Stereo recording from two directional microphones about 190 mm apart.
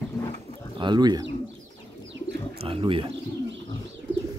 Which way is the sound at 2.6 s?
30° right (ahead or behind).